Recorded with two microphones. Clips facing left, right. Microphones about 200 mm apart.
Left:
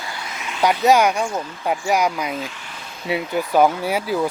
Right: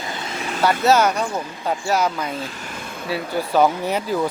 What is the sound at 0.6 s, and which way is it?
Speech, 15° left (ahead or behind).